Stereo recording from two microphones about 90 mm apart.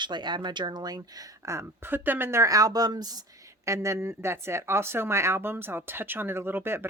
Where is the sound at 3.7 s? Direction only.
35° right (ahead or behind).